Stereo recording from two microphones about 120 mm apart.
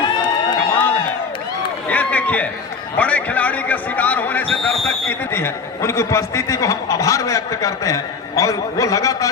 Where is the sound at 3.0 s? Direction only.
10° left (ahead or behind).